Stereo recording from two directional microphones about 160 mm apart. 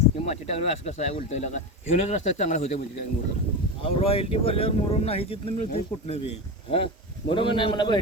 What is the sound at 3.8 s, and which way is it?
Speech, 35° left (ahead or behind).